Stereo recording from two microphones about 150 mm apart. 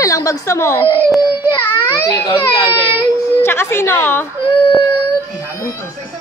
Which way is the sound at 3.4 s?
15° left (ahead or behind).